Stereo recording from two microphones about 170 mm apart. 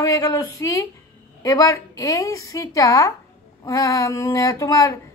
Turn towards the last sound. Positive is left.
turn(degrees=20)  # may be behind; listen again after turning